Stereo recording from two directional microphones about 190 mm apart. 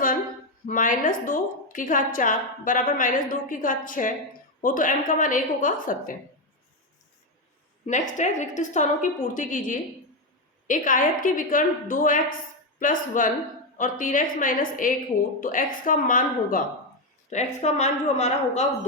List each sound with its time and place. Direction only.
0.7 s a woman's voice: 45° left (ahead or behind)
7.9 s a woman's voice: 40° left (ahead or behind)